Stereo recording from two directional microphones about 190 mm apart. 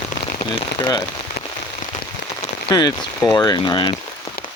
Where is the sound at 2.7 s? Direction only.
20° left (ahead or behind).